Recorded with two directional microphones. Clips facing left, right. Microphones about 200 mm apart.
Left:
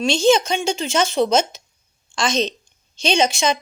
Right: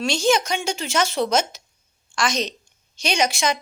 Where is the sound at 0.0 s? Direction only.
25° left (ahead or behind).